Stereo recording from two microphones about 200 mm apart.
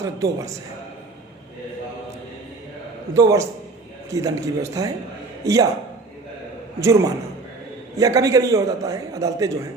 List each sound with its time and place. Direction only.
0.0 s a man's voice: 15° right (ahead or behind)
3.2 s a man's voice: 15° right (ahead or behind)
6.7 s a man's voice: 15° right (ahead or behind)